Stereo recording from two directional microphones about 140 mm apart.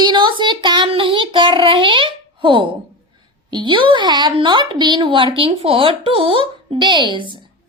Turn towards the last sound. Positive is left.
turn(degrees=-35)  # may be behind; listen again after turning